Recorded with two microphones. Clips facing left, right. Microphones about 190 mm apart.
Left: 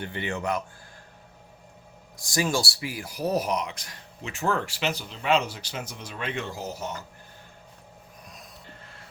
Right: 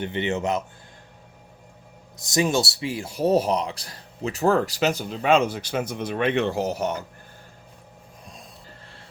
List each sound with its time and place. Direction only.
0.0 s speech: 20° right (ahead or behind)
2.1 s speech: 20° right (ahead or behind); by 7.0 s 70° right (ahead or behind)